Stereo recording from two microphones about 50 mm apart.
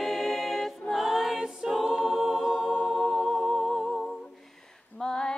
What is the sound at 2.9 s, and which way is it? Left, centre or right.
Humming, centre.